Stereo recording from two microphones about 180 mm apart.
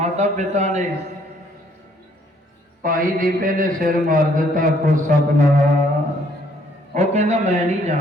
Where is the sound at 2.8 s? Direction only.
50° right (ahead or behind).